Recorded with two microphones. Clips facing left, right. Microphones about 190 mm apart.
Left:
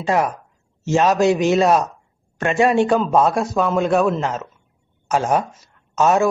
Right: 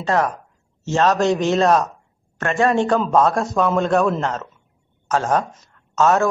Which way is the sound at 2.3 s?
15° left (ahead or behind).